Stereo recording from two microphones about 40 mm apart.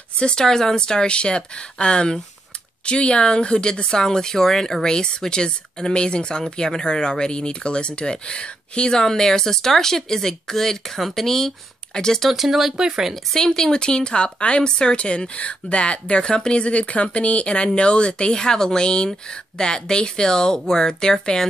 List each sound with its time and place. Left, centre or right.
0.2 s a woman's voice: left
0.5 s a woman's voice: centre
12.2 s speech: centre
13.1 s a woman's voice: centre